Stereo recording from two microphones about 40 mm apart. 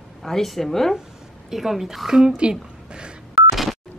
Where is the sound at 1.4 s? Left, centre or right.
Centre.